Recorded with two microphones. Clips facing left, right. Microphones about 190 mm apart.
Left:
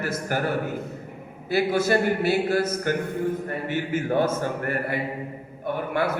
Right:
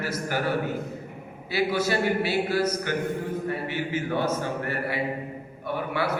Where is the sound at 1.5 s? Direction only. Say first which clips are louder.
Left 3 dB; 50° left (ahead or behind).